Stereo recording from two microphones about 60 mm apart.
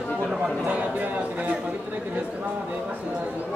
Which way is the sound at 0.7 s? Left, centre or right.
Right.